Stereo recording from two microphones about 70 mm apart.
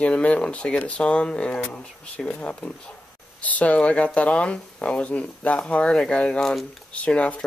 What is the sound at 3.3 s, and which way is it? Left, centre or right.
Speech, left.